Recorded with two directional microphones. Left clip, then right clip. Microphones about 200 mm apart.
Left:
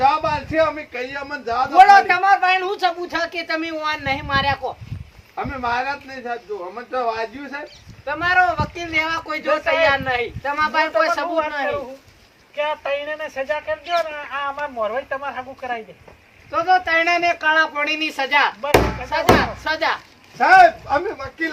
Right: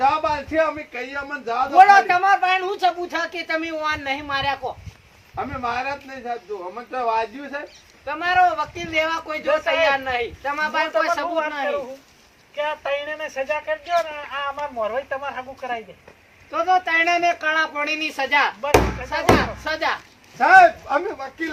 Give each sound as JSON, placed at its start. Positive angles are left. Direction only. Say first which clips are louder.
{"t": 0.0, "sound": "speech", "louder": "left 2 dB", "side_deg": 15}
{"t": 11.6, "sound": "speech", "louder": "left 1 dB", "side_deg": -10}
{"t": 16.5, "sound": "speech", "louder": "left 2 dB", "side_deg": 15}